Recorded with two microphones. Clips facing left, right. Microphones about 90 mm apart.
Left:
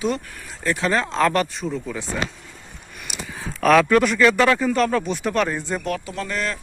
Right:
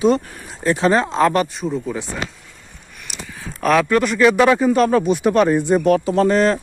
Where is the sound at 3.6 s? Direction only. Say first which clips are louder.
Even; 5° right (ahead or behind).